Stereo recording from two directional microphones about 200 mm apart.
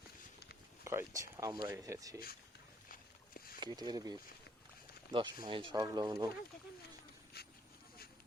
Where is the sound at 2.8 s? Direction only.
45° left (ahead or behind).